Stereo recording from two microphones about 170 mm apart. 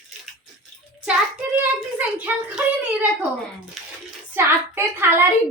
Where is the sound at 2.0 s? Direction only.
10° right (ahead or behind).